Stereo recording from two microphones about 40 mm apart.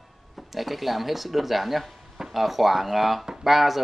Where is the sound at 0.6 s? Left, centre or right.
Centre.